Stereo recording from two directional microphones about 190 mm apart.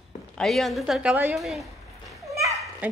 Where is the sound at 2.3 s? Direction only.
15° right (ahead or behind).